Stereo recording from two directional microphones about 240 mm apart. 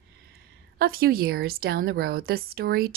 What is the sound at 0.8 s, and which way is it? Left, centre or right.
Speech, right.